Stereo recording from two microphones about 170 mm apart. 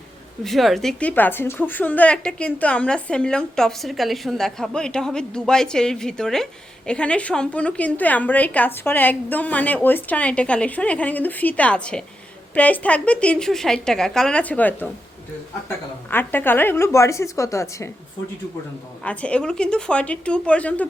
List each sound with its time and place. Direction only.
0.4 s a woman's voice: centre (ahead or behind)
16.0 s a woman's voice: 10° left (ahead or behind)
19.0 s a woman's voice: 5° left (ahead or behind)